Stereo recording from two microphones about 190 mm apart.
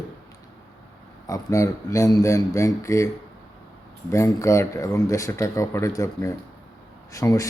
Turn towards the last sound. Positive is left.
turn(degrees=15)  # may be behind; listen again after turning